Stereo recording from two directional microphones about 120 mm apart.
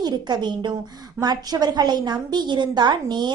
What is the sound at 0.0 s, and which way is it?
A woman's voice, 35° right (ahead or behind).